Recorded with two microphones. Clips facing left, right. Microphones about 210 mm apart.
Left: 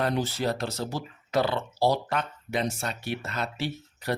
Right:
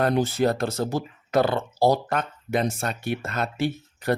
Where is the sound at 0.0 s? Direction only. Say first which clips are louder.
Right 6 dB; 50° right (ahead or behind).